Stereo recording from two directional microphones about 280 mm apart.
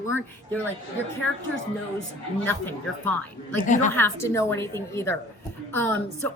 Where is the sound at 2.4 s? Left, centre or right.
Centre.